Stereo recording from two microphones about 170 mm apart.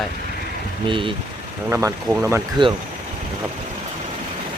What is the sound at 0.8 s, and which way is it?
Speech, 30° right (ahead or behind).